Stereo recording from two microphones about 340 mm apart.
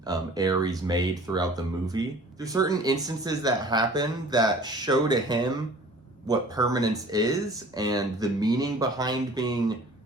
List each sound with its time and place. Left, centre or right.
0.0 s speech: centre